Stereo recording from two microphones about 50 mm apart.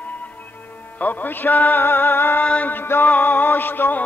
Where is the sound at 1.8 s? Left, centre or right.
Left.